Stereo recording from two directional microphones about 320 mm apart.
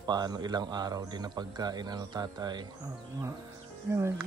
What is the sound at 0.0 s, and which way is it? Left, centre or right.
Speech, centre.